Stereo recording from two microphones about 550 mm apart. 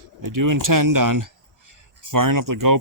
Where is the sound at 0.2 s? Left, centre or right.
Right.